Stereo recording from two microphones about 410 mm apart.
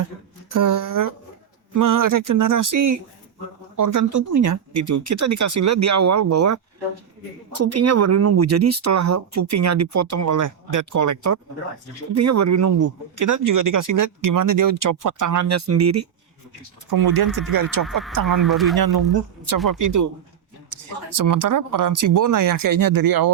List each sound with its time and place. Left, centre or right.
0.5 s speech: right
16.9 s speech: right
17.8 s speech: centre
19.5 s speech: right
21.2 s speech: right